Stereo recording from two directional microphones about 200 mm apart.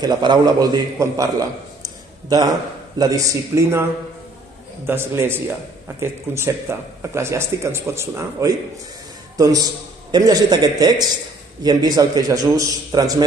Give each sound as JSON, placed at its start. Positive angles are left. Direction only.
{"t": 0.0, "sound": "speech", "side_deg": -20}
{"t": 1.8, "sound": "a sound", "side_deg": -20}
{"t": 3.0, "sound": "speech", "side_deg": -15}
{"t": 4.8, "sound": "a man's voice", "side_deg": -10}